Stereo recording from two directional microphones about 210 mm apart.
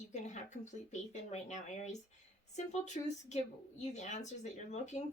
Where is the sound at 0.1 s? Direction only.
35° left (ahead or behind).